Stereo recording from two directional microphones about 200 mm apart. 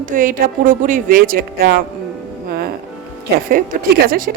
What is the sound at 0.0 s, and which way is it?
Speech, 40° right (ahead or behind).